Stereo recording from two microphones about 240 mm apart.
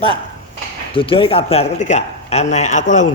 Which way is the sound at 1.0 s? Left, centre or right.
Left.